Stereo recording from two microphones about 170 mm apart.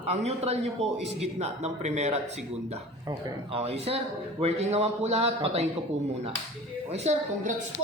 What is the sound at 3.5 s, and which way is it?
A man's voice, 35° right (ahead or behind).